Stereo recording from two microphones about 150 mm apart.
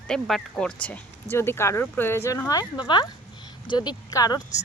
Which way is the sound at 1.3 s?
15° left (ahead or behind).